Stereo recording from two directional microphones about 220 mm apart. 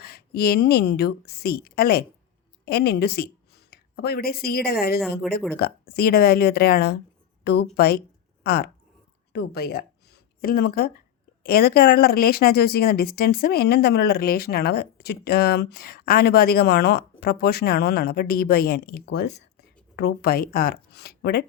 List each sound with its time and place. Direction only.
0.0 s a woman's voice: 45° left (ahead or behind)
4.9 s speech: centre (ahead or behind)
5.5 s a woman's voice: 45° left (ahead or behind)